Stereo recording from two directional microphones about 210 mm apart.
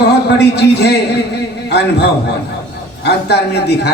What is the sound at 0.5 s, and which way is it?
A man's voice, 55° left (ahead or behind).